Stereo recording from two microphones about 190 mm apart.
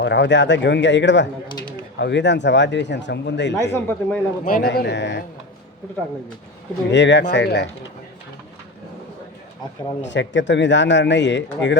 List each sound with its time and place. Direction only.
0.0 s speech: 70° left (ahead or behind)
1.5 s speech: 25° left (ahead or behind)
2.0 s speech: 70° left (ahead or behind)
3.6 s speech: 10° left (ahead or behind)
4.4 s speech: 50° left (ahead or behind); by 5.2 s 65° left (ahead or behind)
6.9 s speech: 70° left (ahead or behind)
10.0 s speech: 70° left (ahead or behind)